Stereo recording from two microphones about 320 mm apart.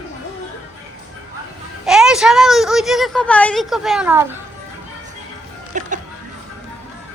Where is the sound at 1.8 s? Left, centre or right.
Centre.